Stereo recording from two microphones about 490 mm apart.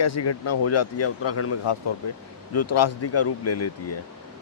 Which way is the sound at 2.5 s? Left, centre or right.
Left.